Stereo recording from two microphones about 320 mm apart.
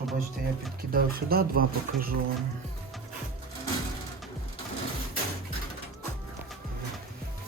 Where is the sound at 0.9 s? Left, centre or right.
Right.